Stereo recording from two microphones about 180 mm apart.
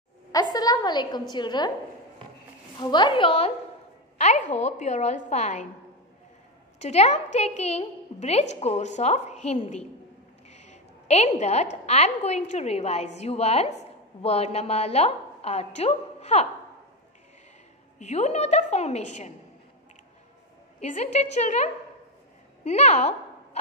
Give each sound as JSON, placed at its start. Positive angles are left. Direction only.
{"t": 0.3, "sound": "a woman's voice", "side_deg": 20}
{"t": 2.8, "sound": "a woman's voice", "side_deg": 25}
{"t": 4.2, "sound": "a woman's voice", "side_deg": 40}
{"t": 6.8, "sound": "a woman's voice", "side_deg": 35}
{"t": 17.9, "sound": "a woman's voice", "side_deg": 40}
{"t": 20.8, "sound": "a woman's voice", "side_deg": 40}
{"t": 22.6, "sound": "a sound", "side_deg": 35}